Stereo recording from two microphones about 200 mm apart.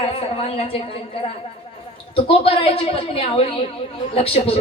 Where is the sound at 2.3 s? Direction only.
30° left (ahead or behind).